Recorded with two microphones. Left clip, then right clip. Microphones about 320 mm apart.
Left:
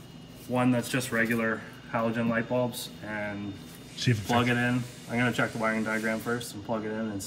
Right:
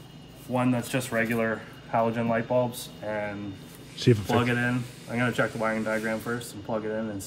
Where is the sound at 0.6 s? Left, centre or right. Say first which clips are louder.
Left 1 dB; right.